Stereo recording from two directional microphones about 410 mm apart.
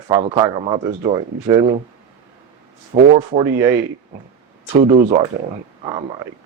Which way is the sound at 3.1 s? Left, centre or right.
Centre.